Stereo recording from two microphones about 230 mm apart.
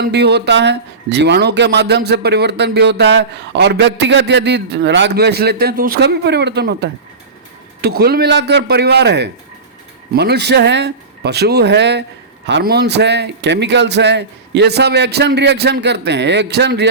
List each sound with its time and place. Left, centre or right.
0.0 s speech: right